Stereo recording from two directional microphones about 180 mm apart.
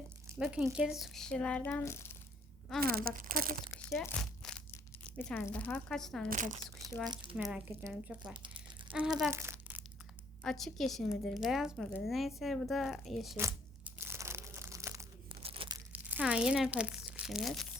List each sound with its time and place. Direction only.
0.3 s speech: 5° right (ahead or behind); by 2.1 s 15° left (ahead or behind)
2.8 s speech: 55° right (ahead or behind)
4.0 s crumpling: 5° left (ahead or behind)
4.7 s speech: 10° left (ahead or behind)
6.3 s speech: 45° right (ahead or behind)
7.1 s speech: 25° right (ahead or behind)
7.3 s speech: 10° right (ahead or behind)
9.3 s crumpling: 15° right (ahead or behind)
10.4 s speech: centre (ahead or behind)
13.3 s crumpling: 10° right (ahead or behind)
15.4 s tearing: 30° right (ahead or behind)
15.9 s speech: 10° right (ahead or behind)